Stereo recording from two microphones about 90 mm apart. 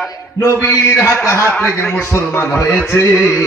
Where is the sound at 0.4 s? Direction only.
25° left (ahead or behind).